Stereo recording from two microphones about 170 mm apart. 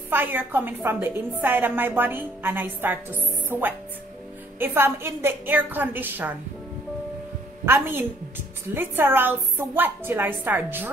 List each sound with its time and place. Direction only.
0.1 s a woman's voice: 10° right (ahead or behind)
7.6 s a woman's voice: 15° right (ahead or behind)